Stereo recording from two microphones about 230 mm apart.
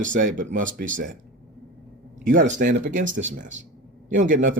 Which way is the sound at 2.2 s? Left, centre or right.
Right.